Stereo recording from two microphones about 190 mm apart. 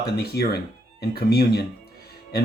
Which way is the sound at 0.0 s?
55° left (ahead or behind).